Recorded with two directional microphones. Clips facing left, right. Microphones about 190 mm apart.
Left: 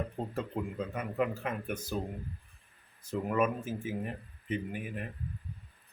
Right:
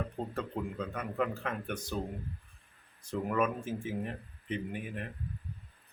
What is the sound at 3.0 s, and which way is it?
Speech, 5° left (ahead or behind).